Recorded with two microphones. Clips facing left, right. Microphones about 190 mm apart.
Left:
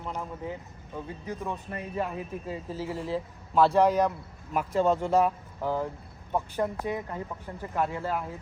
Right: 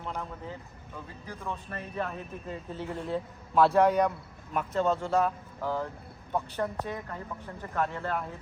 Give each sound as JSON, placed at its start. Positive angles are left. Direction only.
{"t": 0.0, "sound": "speech", "side_deg": 10}
{"t": 4.5, "sound": "speech", "side_deg": 10}